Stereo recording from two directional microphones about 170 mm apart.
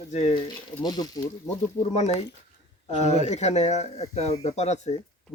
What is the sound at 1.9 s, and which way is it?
Speech, 40° left (ahead or behind).